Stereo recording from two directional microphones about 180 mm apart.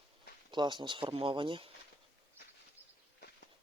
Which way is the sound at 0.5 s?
25° right (ahead or behind).